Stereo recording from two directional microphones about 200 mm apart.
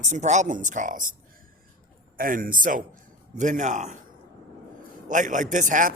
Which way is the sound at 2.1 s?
45° right (ahead or behind).